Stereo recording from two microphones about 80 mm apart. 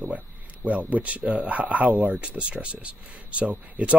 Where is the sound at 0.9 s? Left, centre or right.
Centre.